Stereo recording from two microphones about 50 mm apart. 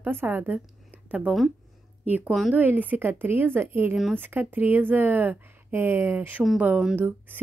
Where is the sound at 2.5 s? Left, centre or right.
Right.